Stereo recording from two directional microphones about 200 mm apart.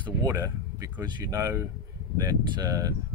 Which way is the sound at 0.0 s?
15° right (ahead or behind).